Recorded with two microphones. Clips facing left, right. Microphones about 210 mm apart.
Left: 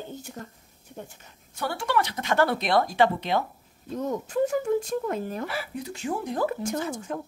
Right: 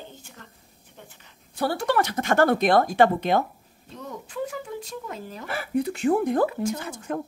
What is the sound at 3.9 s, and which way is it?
Speech, 45° left (ahead or behind).